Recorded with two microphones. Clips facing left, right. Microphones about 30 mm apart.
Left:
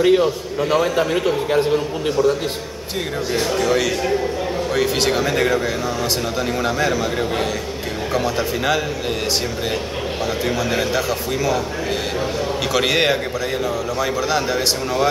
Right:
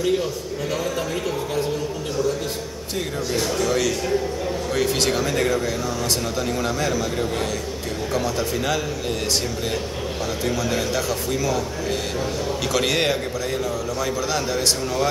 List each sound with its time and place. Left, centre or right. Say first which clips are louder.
0.0 s a man's voice: left 7 dB; left
3.3 s a man's voice: left 4 dB; centre
6.6 s a man's voice: left 5 dB; centre
10.4 s a man's voice: left 2 dB; centre
12.7 s speech: left 4 dB; centre
14.3 s a man's voice: left 3 dB; centre